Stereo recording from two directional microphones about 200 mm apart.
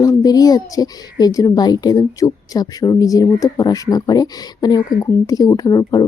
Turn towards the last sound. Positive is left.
turn(degrees=20)  # may be behind; listen again after turning